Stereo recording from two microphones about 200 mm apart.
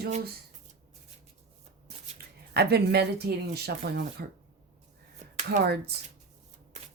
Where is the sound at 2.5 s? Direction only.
55° right (ahead or behind).